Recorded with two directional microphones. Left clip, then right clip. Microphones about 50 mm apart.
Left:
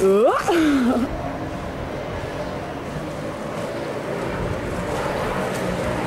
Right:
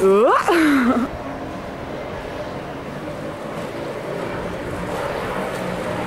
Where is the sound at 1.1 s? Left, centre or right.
Centre.